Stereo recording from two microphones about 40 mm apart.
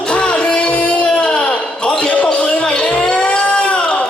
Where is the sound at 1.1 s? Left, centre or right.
Left.